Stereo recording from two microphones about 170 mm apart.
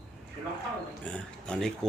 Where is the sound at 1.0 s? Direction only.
5° left (ahead or behind).